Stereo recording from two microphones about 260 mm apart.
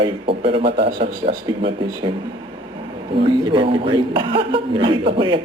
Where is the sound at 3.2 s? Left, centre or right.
Centre.